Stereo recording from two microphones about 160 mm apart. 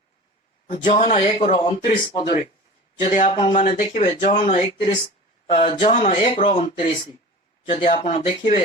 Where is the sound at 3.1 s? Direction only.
45° left (ahead or behind).